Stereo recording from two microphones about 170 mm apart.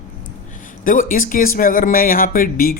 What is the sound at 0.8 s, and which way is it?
Speech, 55° left (ahead or behind).